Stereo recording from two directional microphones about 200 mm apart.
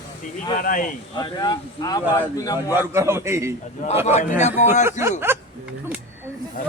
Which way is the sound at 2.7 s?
10° right (ahead or behind).